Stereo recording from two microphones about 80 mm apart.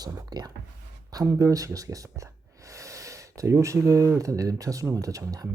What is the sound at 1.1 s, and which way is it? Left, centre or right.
Speech, right.